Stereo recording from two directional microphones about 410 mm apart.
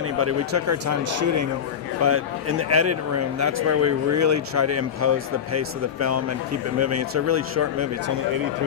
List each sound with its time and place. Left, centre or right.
0.2 s speech: right